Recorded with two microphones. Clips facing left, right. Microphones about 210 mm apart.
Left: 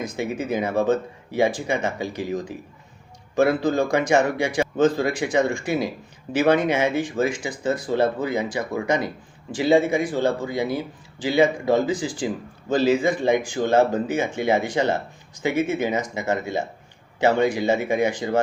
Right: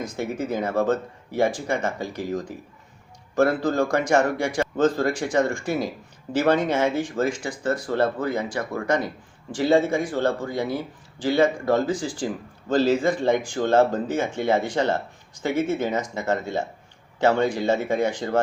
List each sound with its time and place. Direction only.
0.2 s speech: 20° left (ahead or behind)